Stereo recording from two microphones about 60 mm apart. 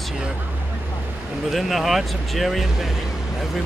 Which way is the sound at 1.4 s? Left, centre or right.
Centre.